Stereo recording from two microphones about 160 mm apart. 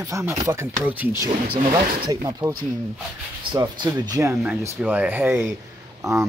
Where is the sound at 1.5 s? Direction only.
25° right (ahead or behind).